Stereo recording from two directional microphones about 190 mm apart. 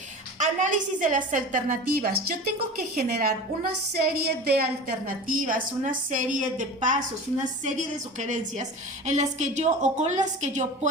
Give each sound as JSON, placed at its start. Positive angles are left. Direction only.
{"t": 0.3, "sound": "a woman's voice", "side_deg": -40}
{"t": 5.3, "sound": "a woman's voice", "side_deg": -45}